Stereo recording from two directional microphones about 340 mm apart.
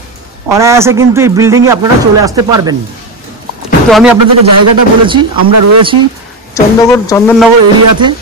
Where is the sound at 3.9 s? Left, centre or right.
Centre.